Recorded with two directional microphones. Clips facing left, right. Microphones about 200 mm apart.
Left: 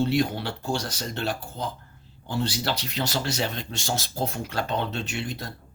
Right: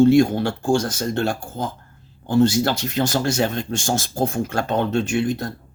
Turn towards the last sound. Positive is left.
turn(degrees=-50)  # may be behind; listen again after turning